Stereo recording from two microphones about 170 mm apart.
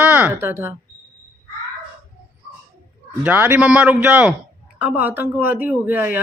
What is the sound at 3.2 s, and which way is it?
Speech, 10° right (ahead or behind).